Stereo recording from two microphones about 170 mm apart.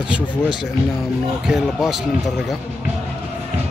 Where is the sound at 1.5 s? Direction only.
Centre (ahead or behind).